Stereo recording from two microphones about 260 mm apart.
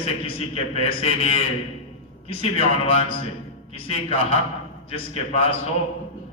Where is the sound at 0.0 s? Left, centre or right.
Left.